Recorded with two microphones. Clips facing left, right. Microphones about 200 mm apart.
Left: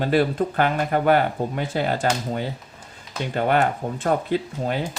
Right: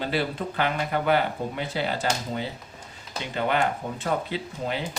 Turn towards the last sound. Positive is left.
turn(degrees=50)  # may be behind; listen again after turning